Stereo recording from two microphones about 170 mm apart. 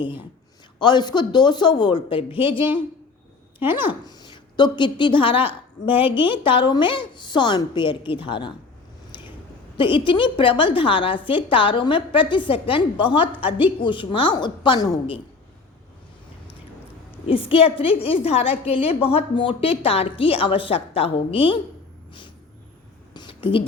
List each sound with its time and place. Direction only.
0.0 s a woman's voice: 30° left (ahead or behind)
3.6 s speech: 10° right (ahead or behind)
3.8 s a woman's voice: 25° left (ahead or behind)
9.7 s a woman's voice: 30° left (ahead or behind)
17.2 s a woman's voice: 35° left (ahead or behind)
23.1 s a sound: 30° left (ahead or behind)